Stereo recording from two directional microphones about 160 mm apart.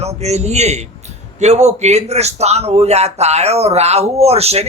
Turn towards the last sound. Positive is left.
turn(degrees=-40)  # may be behind; listen again after turning